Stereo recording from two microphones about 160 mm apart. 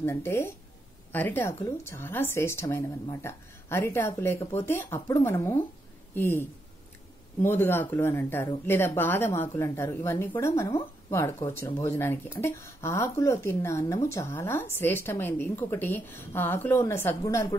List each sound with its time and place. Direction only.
0.0 s a woman's voice: 15° left (ahead or behind)
7.4 s a woman's voice: 15° left (ahead or behind)